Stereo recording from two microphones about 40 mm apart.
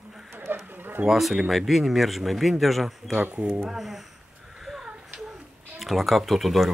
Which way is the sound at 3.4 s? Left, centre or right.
Right.